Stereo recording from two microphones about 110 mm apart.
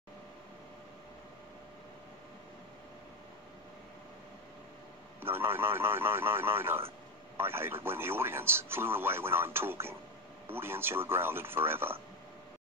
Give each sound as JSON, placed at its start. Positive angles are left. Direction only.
{"t": 5.2, "sound": "speech", "side_deg": -20}